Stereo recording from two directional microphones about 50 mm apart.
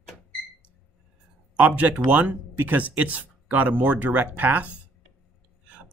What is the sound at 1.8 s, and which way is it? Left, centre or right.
Speech, right.